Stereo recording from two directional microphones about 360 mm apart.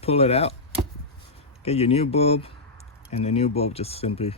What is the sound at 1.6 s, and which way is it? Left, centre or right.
Speech, centre.